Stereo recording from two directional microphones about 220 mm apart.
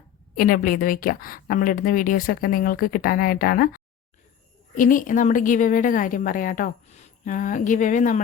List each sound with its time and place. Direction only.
0.3 s a woman's voice: 40° left (ahead or behind)